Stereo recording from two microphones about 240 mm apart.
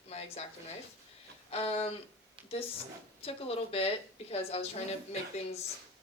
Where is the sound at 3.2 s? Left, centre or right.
Left.